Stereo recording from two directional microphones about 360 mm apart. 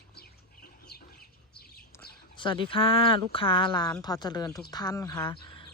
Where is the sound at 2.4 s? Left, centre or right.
Centre.